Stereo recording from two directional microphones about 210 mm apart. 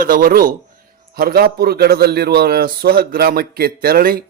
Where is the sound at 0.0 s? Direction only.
45° right (ahead or behind).